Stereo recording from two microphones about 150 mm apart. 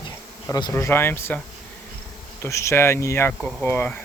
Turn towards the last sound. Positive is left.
turn(degrees=15)  # may be behind; listen again after turning